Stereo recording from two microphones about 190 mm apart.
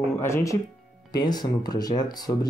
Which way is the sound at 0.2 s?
15° left (ahead or behind).